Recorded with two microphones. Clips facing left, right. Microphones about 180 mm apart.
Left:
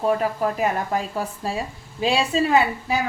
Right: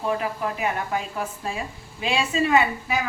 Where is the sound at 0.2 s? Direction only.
40° left (ahead or behind).